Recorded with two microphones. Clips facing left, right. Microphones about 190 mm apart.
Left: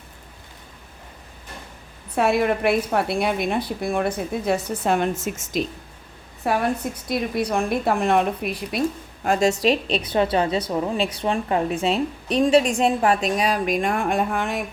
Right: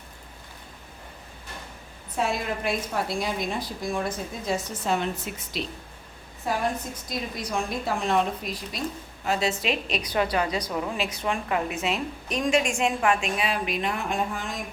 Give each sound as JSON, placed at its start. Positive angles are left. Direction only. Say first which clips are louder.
{"t": 2.1, "sound": "a woman's voice", "louder": "left 8 dB", "side_deg": 65}
{"t": 6.4, "sound": "a woman's voice", "louder": "left 5 dB", "side_deg": 65}
{"t": 9.2, "sound": "a woman's voice", "louder": "left 7 dB", "side_deg": 50}